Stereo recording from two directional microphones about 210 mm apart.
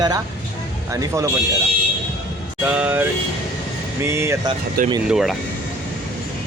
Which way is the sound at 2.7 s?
5° right (ahead or behind).